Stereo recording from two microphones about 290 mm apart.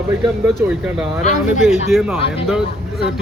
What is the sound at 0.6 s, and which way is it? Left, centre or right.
Speech, centre.